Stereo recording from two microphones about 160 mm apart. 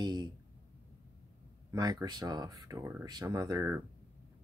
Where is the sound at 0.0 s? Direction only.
25° right (ahead or behind).